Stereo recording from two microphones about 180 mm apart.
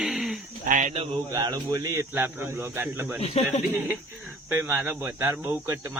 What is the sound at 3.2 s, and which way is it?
Speech, 35° left (ahead or behind).